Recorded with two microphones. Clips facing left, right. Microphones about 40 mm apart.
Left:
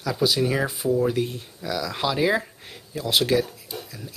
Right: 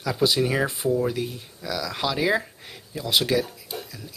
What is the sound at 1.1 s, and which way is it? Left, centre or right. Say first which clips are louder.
Speech: left 3 dB; centre.